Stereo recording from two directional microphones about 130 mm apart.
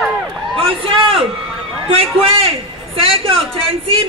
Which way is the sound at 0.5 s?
45° right (ahead or behind).